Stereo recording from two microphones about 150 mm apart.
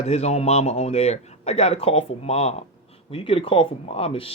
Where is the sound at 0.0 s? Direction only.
45° left (ahead or behind).